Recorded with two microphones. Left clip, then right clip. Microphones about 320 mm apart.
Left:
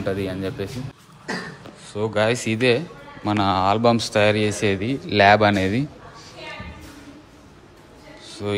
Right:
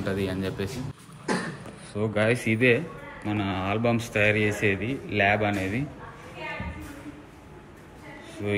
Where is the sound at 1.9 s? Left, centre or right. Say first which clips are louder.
Left 4 dB; centre.